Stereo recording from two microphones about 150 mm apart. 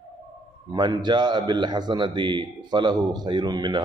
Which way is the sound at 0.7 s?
30° right (ahead or behind).